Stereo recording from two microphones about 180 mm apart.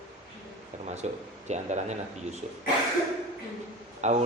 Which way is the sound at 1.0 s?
40° right (ahead or behind).